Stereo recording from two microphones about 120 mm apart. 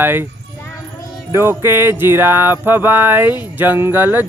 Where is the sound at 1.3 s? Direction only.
20° right (ahead or behind).